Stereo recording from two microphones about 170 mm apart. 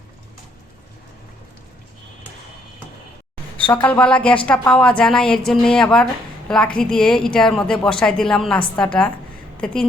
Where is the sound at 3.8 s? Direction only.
10° left (ahead or behind).